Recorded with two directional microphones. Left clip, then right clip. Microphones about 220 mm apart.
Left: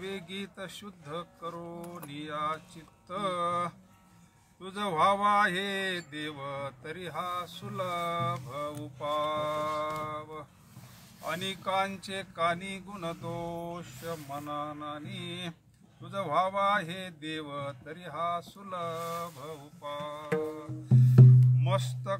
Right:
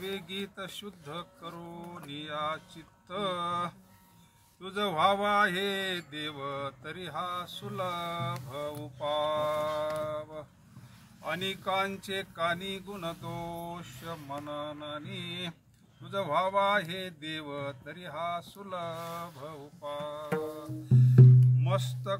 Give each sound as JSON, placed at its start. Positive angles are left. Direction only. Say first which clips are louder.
{"t": 0.0, "sound": "speech", "louder": "right 2 dB", "side_deg": 0}
{"t": 10.0, "sound": "speech", "louder": "right 2 dB", "side_deg": 15}
{"t": 11.2, "sound": "speech", "louder": "right 1 dB", "side_deg": 0}
{"t": 21.5, "sound": "speech", "louder": "left 1 dB", "side_deg": 0}